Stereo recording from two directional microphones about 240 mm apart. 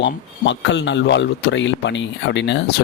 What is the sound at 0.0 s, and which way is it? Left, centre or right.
A man's voice, left.